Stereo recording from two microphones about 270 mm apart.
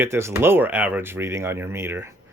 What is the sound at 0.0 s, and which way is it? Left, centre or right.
Speech, centre.